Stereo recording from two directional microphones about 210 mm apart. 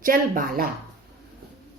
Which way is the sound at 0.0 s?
40° right (ahead or behind).